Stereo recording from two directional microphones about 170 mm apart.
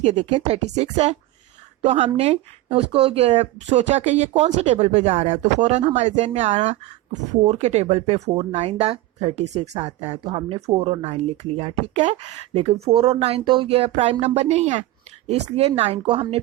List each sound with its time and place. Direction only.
0.0 s speech: 40° right (ahead or behind)